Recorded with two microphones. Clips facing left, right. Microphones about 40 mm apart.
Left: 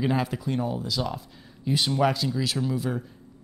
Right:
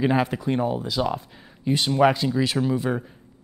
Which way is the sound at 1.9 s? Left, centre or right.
Centre.